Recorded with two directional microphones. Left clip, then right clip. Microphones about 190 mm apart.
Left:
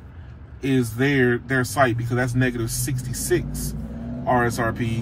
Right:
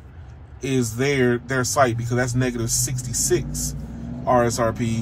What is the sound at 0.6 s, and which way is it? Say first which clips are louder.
Speech: even; 35° right (ahead or behind).